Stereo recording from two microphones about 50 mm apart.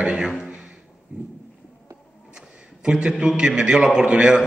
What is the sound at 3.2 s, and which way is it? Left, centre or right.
A man's voice, centre.